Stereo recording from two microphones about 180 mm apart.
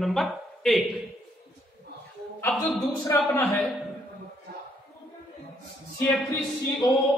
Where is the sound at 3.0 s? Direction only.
15° left (ahead or behind).